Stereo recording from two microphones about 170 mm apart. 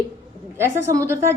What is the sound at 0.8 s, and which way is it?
Speech, 15° right (ahead or behind).